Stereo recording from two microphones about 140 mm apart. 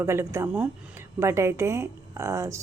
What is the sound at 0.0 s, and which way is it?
Speech, 20° right (ahead or behind).